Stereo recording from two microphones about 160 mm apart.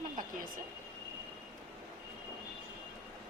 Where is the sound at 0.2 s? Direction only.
60° right (ahead or behind).